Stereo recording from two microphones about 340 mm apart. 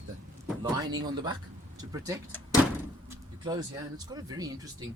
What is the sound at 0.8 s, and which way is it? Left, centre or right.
Speech, centre.